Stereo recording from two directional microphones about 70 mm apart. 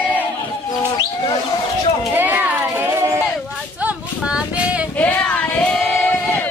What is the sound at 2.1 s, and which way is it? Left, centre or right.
Music, right.